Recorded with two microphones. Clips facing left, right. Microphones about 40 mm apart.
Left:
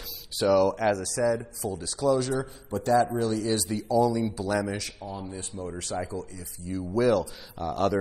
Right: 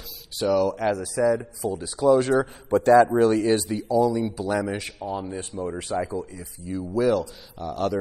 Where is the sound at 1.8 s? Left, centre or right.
Right.